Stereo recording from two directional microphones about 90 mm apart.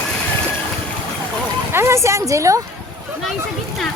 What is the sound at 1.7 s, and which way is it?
Speech, 30° right (ahead or behind).